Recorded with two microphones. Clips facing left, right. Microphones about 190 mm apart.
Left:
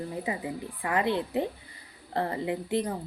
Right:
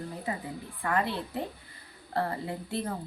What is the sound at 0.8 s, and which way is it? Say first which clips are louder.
Speech: left 3 dB; 15° left (ahead or behind).